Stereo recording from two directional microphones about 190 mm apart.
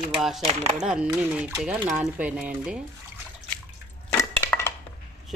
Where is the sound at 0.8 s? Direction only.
5° right (ahead or behind).